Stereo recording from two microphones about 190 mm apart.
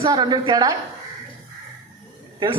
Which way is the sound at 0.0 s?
20° right (ahead or behind).